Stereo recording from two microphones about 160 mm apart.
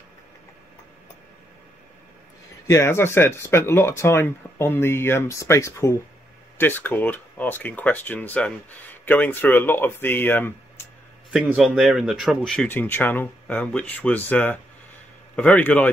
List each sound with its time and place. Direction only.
2.7 s speech: 15° left (ahead or behind)
11.4 s speech: 5° right (ahead or behind)